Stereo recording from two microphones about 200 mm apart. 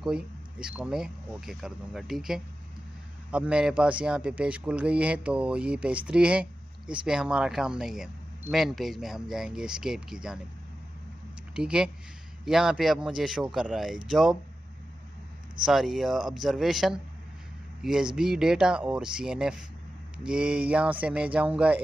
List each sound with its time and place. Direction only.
0.0 s speech: 5° right (ahead or behind)
11.5 s speech: 5° right (ahead or behind)
15.6 s speech: centre (ahead or behind)